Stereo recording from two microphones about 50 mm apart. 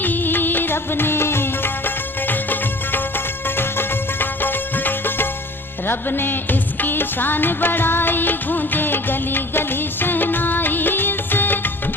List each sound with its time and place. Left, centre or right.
0.0 s music: left